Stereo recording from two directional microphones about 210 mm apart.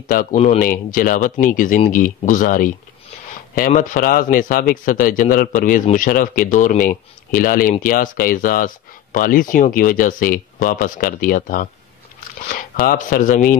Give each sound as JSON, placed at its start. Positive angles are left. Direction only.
{"t": 0.0, "sound": "speech", "side_deg": 40}